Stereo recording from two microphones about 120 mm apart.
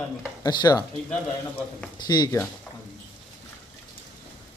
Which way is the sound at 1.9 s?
35° left (ahead or behind).